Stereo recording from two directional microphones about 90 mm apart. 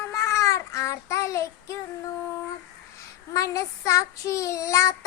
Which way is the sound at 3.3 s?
35° left (ahead or behind).